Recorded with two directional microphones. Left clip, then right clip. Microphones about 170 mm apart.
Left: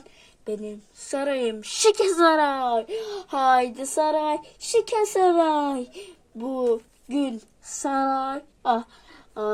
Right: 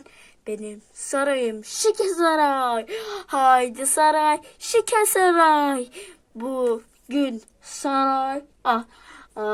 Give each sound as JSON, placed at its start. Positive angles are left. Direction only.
{"t": 0.4, "sound": "speech", "side_deg": 0}
{"t": 1.5, "sound": "a woman's voice", "side_deg": 20}
{"t": 2.3, "sound": "speech", "side_deg": 0}
{"t": 3.3, "sound": "speech", "side_deg": 10}
{"t": 3.6, "sound": "speech", "side_deg": -10}
{"t": 7.7, "sound": "speech", "side_deg": -25}
{"t": 8.0, "sound": "speech", "side_deg": -10}